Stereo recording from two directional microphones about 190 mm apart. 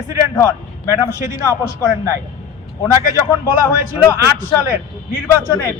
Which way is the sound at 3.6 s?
15° left (ahead or behind).